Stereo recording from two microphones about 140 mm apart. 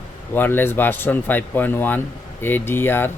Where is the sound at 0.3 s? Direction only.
15° left (ahead or behind).